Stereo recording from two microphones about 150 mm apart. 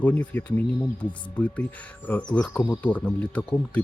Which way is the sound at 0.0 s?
10° left (ahead or behind).